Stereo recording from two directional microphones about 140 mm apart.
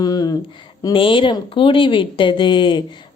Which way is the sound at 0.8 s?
35° left (ahead or behind).